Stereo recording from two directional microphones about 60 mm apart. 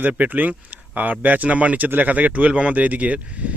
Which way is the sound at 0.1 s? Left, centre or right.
Right.